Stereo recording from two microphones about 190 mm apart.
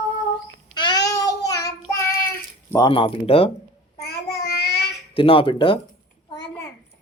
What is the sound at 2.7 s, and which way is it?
Speech, 20° left (ahead or behind).